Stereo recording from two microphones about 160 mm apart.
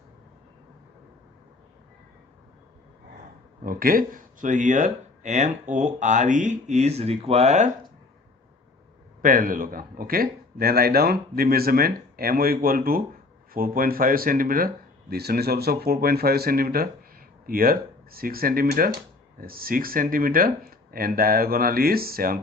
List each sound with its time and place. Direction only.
3.6 s speech: 60° right (ahead or behind); by 7.7 s 45° right (ahead or behind)
9.2 s speech: 60° right (ahead or behind)
15.1 s speech: 80° right